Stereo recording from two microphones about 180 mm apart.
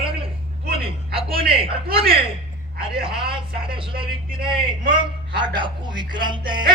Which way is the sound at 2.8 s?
30° right (ahead or behind).